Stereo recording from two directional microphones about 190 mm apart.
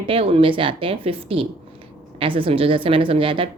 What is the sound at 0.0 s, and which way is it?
A woman's voice, 30° right (ahead or behind).